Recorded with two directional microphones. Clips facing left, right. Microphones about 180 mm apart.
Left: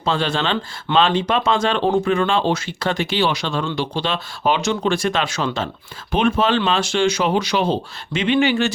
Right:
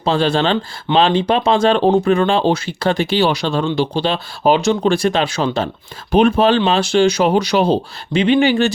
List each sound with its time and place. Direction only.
0.0 s speech: 35° right (ahead or behind)